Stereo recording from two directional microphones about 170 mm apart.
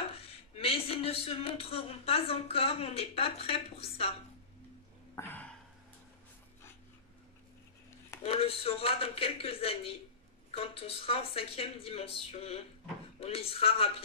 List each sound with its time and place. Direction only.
0.1 s speech: 35° left (ahead or behind)
5.1 s a sound: 10° left (ahead or behind)
8.2 s speech: 35° left (ahead or behind)